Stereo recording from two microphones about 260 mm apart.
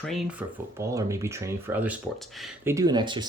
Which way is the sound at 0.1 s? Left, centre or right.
Centre.